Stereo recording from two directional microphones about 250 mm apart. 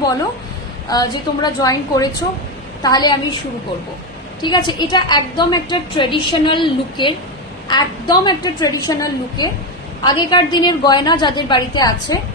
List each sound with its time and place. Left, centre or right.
0.8 s a woman's voice: centre
4.4 s a woman's voice: centre